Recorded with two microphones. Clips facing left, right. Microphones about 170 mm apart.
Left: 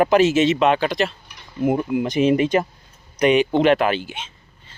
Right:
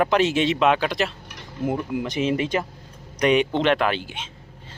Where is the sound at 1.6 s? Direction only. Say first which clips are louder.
Left 5 dB; 15° left (ahead or behind).